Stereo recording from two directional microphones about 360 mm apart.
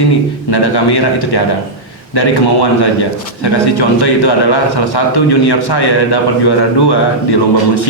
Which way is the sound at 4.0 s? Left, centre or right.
Left.